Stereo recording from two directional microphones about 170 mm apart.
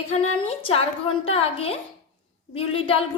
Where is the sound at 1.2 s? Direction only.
35° left (ahead or behind).